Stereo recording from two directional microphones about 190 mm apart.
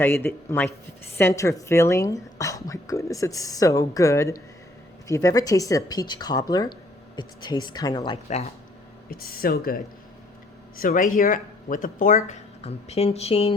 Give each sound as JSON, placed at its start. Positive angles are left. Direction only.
{"t": 0.0, "sound": "speech", "side_deg": 15}
{"t": 9.0, "sound": "speech", "side_deg": 50}